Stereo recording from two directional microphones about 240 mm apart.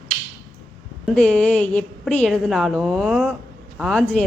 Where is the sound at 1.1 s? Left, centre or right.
Centre.